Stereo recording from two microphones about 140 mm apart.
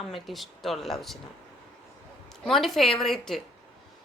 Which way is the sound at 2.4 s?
Centre (ahead or behind).